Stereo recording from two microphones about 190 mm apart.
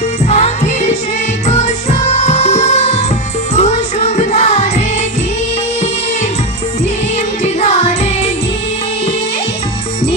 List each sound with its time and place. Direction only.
0.3 s music: 35° left (ahead or behind)
7.4 s music: 35° left (ahead or behind)